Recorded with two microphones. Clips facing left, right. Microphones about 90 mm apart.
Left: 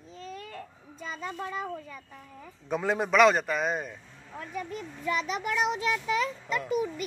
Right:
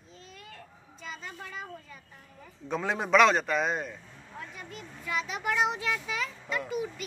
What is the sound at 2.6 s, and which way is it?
A man's voice, 5° left (ahead or behind).